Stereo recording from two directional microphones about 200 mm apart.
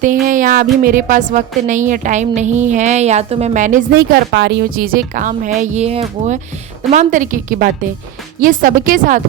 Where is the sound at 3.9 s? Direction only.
55° right (ahead or behind).